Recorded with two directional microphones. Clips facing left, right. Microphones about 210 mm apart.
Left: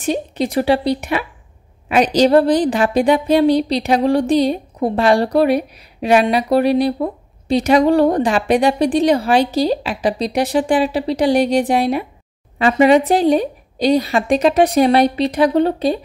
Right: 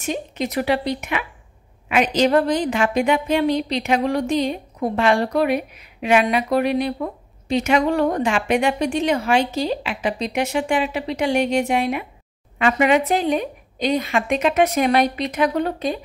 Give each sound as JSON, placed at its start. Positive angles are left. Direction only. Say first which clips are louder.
{"t": 0.0, "sound": "a woman's voice", "louder": "left 6 dB", "side_deg": 35}